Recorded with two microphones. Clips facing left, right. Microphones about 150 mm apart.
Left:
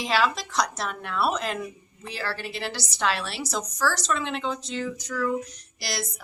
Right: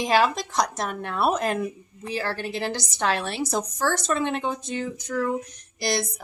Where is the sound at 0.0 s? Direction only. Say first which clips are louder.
Right 3 dB; 50° right (ahead or behind).